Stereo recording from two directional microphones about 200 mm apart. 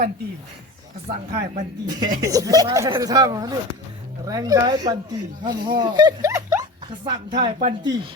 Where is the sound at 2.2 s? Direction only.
15° right (ahead or behind).